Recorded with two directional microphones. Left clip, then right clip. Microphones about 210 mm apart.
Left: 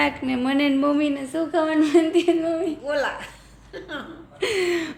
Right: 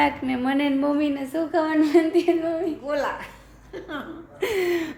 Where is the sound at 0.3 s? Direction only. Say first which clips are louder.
Left 2 dB; 15° left (ahead or behind).